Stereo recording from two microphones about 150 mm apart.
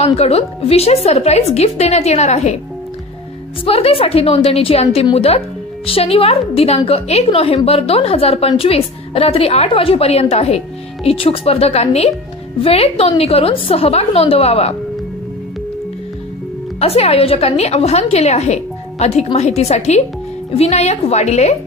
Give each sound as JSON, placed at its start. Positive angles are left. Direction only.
{"t": 0.0, "sound": "a woman's voice", "side_deg": 45}
{"t": 3.6, "sound": "a woman's voice", "side_deg": 40}
{"t": 16.8, "sound": "a woman's voice", "side_deg": 40}